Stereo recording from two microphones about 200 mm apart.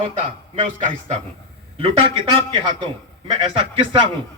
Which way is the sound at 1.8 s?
25° right (ahead or behind).